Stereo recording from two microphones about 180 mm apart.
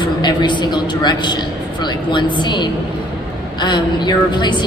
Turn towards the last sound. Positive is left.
turn(degrees=25)  # may be behind; listen again after turning